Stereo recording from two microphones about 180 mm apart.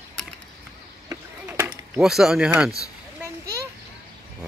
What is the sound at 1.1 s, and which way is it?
Chop, 15° right (ahead or behind).